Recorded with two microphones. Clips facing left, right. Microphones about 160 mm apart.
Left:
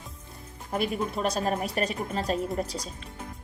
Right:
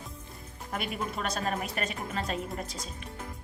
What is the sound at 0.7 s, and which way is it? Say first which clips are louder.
A woman's voice: left 6 dB; 35° left (ahead or behind).